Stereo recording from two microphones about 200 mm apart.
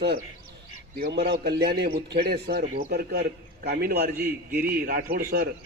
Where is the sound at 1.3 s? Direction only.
55° right (ahead or behind).